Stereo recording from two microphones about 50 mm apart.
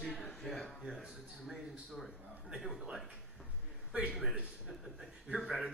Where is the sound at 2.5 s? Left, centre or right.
Centre.